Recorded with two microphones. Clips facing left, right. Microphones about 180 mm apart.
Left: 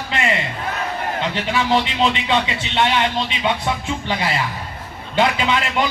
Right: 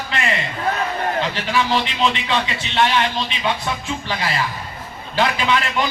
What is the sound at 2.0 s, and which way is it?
A man's voice, 20° left (ahead or behind).